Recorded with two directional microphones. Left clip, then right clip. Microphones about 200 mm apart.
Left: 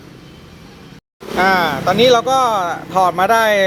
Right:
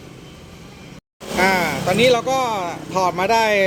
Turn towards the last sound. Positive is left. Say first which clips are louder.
# left 4 dB
turn(degrees=-5)  # may be behind; listen again after turning